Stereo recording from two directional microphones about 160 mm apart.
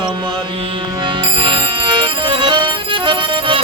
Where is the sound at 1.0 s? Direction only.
30° right (ahead or behind).